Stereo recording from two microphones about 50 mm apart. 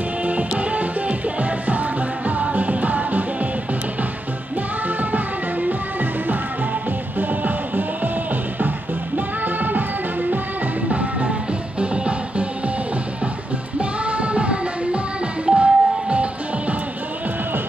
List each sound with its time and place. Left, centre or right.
0.2 s music: right
4.8 s music: right
10.9 s music: right
13.7 s music: right